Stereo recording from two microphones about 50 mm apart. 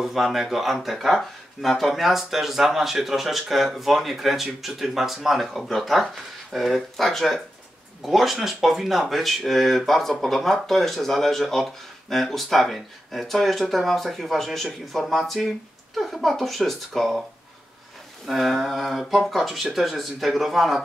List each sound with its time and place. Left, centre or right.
0.0 s speech: centre
18.2 s speech: centre